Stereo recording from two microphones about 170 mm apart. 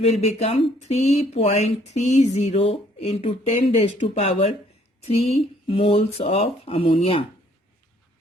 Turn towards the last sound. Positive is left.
turn(degrees=30)  # may be behind; listen again after turning